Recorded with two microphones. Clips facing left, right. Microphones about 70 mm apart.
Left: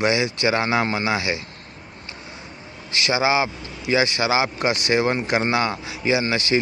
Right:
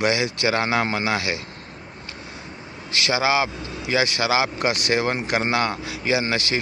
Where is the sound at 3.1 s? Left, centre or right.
Centre.